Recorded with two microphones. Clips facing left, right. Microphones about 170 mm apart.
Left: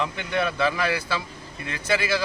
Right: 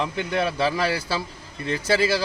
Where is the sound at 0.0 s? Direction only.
35° right (ahead or behind).